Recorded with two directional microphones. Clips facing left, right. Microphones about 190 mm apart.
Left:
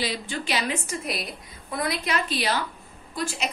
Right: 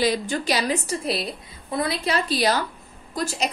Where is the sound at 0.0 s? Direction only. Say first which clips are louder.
Right 7 dB; 40° right (ahead or behind).